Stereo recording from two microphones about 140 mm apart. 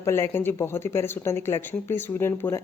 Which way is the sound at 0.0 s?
15° left (ahead or behind).